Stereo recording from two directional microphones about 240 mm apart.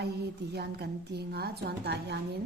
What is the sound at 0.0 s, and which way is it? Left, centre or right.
A woman's voice, right.